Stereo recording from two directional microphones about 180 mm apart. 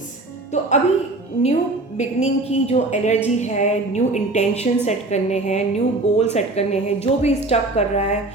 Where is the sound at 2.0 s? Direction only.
35° left (ahead or behind).